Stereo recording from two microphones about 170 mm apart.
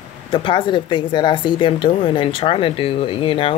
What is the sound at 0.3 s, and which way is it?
Speech, 30° left (ahead or behind).